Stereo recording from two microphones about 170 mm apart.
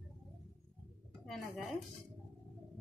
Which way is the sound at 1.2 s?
Centre (ahead or behind).